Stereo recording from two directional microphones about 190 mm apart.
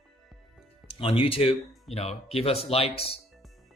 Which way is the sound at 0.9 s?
30° left (ahead or behind).